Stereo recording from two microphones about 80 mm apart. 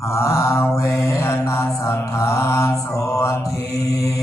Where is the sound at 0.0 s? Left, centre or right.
Left.